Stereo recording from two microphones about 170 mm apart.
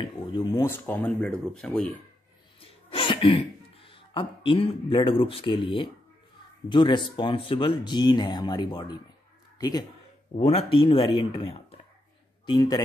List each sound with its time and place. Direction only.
0.0 s speech: 25° left (ahead or behind)
0.6 s speech: 15° left (ahead or behind)
2.6 s speech: 30° left (ahead or behind)
10.3 s speech: 35° left (ahead or behind)